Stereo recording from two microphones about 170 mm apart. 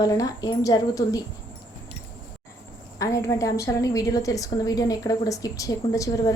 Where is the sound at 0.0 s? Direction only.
20° left (ahead or behind).